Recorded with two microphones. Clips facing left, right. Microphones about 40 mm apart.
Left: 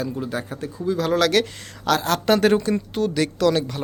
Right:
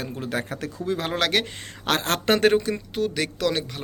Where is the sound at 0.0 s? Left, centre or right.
Right.